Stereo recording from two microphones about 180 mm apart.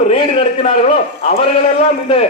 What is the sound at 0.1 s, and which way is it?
A man's voice, 30° left (ahead or behind).